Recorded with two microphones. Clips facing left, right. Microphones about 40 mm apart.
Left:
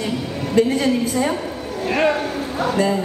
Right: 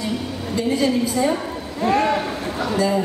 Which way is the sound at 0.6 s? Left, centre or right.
Left.